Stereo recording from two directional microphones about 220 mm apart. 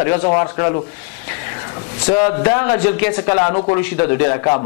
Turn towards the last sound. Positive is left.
turn(degrees=25)  # may be behind; listen again after turning